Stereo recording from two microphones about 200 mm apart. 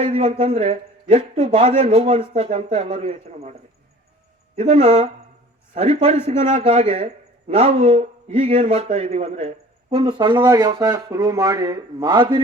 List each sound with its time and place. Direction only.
0.0 s a man's voice: 30° right (ahead or behind)